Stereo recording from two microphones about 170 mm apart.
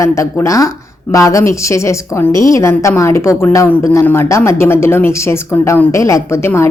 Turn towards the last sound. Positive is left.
turn(degrees=15)  # may be behind; listen again after turning